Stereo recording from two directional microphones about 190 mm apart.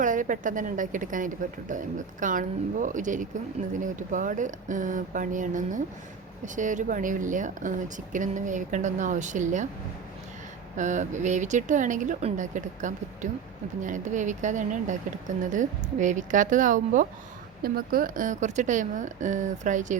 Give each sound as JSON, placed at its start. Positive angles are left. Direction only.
{"t": 0.0, "sound": "speech", "side_deg": -45}
{"t": 10.8, "sound": "speech", "side_deg": -40}